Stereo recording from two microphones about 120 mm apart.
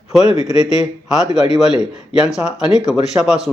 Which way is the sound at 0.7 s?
5° right (ahead or behind).